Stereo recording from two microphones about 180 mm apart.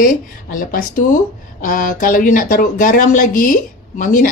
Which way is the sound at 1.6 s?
50° left (ahead or behind).